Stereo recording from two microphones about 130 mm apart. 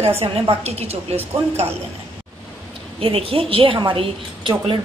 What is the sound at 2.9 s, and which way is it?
A woman's voice, 45° right (ahead or behind).